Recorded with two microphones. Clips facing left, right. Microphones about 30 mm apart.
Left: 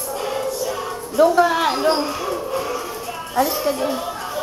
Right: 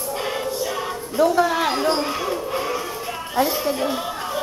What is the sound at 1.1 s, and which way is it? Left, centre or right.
Speech, centre.